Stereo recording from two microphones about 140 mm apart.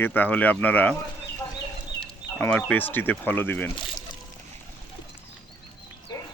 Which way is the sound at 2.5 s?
10° left (ahead or behind).